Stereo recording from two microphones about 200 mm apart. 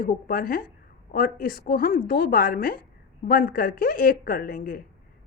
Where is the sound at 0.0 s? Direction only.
45° left (ahead or behind).